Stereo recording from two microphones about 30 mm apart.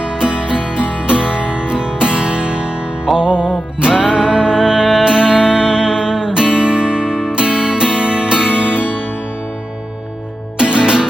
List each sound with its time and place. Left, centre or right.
0.0 s music: right
4.1 s music: centre
10.6 s music: right